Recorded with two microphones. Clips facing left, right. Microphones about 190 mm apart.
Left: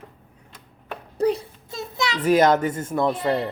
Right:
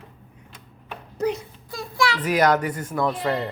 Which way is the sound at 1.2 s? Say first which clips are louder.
Left 3 dB; 30° left (ahead or behind).